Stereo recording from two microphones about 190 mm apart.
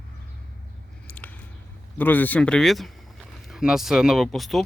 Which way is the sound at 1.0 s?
10° left (ahead or behind).